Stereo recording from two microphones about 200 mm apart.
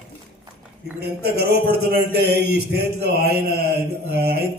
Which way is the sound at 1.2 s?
50° right (ahead or behind).